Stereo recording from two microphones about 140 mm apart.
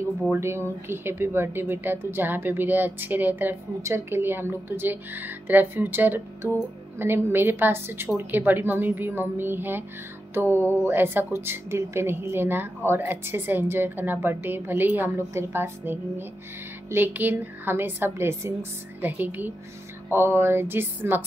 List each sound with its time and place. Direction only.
0.3 s speech: 20° right (ahead or behind)